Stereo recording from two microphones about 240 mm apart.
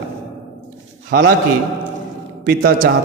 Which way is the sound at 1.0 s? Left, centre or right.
Right.